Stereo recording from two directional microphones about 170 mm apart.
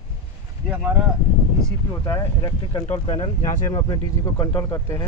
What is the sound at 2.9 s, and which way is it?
Speech, 40° left (ahead or behind).